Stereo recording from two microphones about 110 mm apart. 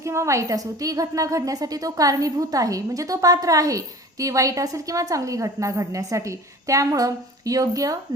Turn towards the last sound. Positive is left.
turn(degrees=-30)  # may be behind; listen again after turning